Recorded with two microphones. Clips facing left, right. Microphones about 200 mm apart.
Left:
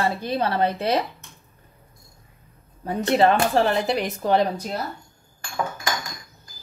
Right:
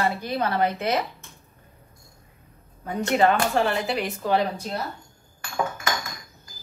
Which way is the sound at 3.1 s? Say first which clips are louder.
Left 2 dB; 35° left (ahead or behind).